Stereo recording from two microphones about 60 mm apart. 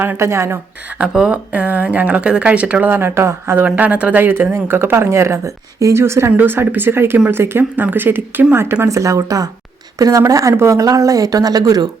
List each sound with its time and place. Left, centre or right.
0.0 s speech: right
1.1 s speech: centre
1.5 s a woman's voice: right
2.9 s speech: right
3.8 s speech: right
6.3 s speech: right
8.9 s speech: right